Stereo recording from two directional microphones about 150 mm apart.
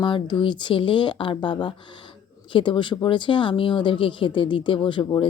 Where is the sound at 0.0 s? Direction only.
30° left (ahead or behind).